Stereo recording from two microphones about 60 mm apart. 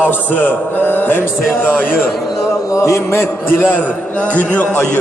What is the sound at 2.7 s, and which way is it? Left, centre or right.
Speech, left.